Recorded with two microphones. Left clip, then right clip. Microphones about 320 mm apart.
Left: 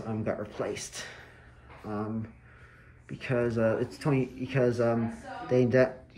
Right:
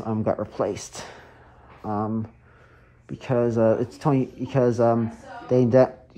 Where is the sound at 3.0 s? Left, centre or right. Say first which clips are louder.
Right 6 dB; centre.